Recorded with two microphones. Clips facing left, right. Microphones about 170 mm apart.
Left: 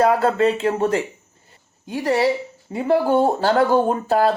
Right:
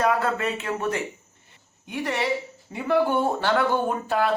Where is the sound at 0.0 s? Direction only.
30° left (ahead or behind).